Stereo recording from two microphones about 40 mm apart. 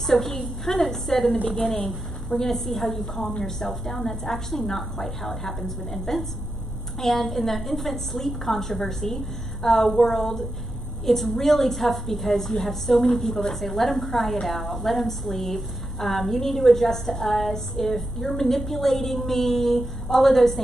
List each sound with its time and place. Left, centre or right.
0.0 s a woman's voice: centre
4.1 s a woman's voice: centre
4.5 s a woman's voice: centre